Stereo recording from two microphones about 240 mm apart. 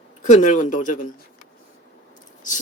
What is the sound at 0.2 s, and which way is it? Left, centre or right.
Speech, left.